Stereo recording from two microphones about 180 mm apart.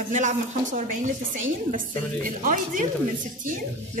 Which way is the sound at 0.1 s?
45° right (ahead or behind).